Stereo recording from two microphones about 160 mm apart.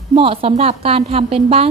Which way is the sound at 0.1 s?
35° right (ahead or behind).